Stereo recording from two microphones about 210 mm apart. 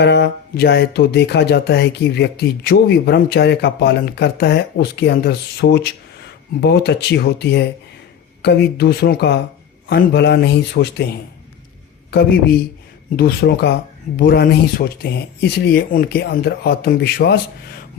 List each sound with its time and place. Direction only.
0.0 s speech: 50° left (ahead or behind)
13.1 s speech: 45° left (ahead or behind)